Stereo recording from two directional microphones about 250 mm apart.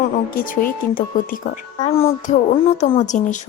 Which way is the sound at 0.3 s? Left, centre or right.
Left.